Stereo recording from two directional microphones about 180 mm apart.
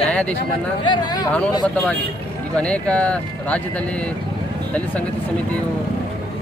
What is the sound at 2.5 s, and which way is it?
Speech, 5° left (ahead or behind).